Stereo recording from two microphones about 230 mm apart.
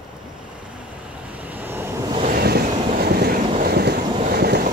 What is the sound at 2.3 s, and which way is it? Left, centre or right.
Vehicle, right.